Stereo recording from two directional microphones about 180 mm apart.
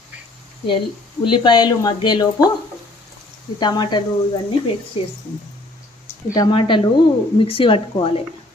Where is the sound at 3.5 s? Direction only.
25° left (ahead or behind).